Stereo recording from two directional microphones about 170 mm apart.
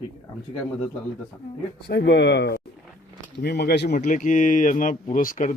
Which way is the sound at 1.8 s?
80° left.